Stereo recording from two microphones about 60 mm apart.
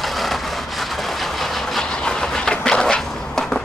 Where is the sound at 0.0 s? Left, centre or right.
Centre.